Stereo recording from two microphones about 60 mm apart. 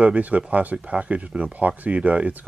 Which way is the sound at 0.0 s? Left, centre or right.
Right.